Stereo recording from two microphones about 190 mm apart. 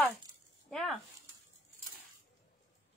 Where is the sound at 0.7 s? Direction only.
Centre (ahead or behind).